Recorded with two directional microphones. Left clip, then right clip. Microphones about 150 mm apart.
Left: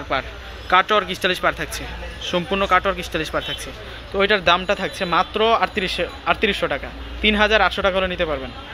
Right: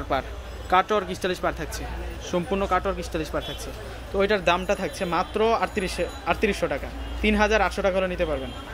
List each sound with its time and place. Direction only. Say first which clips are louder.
0.1 s a man's voice: left 3 dB; 20° right (ahead or behind)
0.7 s a man's voice: left 5 dB; 10° right (ahead or behind)